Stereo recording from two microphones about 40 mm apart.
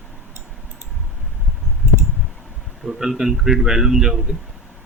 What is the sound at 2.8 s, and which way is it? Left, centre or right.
A man's voice, centre.